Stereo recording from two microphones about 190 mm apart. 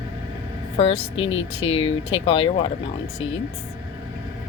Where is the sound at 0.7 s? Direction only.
30° left (ahead or behind).